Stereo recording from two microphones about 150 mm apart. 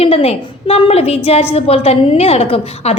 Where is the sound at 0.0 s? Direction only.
40° left (ahead or behind).